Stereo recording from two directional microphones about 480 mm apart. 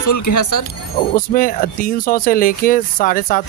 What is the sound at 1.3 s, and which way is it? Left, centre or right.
Speech, centre.